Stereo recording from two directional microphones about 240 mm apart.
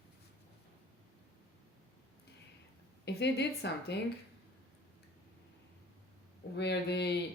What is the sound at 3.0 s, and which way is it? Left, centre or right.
Speech, left.